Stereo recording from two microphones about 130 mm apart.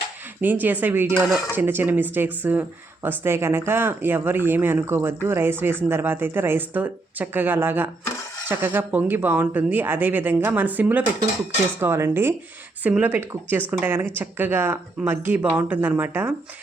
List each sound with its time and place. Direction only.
0.4 s speech: 15° right (ahead or behind)